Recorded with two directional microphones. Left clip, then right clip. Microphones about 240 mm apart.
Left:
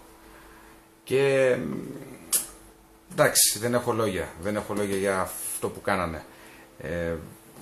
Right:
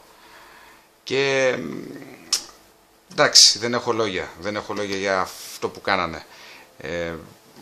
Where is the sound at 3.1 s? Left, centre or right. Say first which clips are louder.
Right 8 dB; right.